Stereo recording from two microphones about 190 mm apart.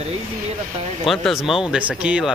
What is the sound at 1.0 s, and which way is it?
Speech, centre (ahead or behind).